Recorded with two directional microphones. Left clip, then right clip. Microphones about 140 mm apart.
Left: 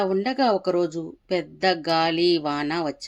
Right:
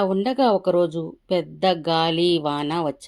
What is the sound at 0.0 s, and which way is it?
Speech, 35° right (ahead or behind).